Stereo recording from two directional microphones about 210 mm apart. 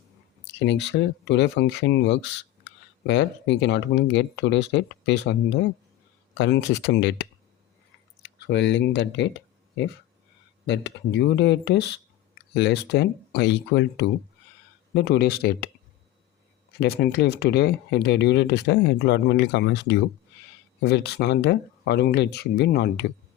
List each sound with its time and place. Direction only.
0.6 s speech: 55° left (ahead or behind)
10.7 s speech: 60° left (ahead or behind)
16.8 s speech: 50° left (ahead or behind)